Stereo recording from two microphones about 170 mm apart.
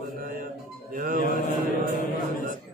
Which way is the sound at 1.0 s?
55° right (ahead or behind).